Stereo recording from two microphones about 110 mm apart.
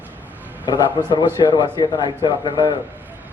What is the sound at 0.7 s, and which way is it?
A man's voice, 45° left (ahead or behind).